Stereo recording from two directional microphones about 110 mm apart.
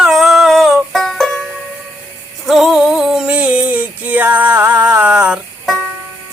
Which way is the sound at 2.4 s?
Centre (ahead or behind).